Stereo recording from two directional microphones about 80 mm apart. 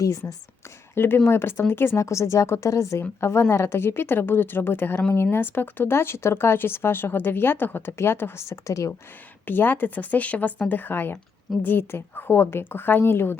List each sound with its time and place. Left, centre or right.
0.0 s speech: left
0.9 s a woman's voice: left
9.5 s speech: left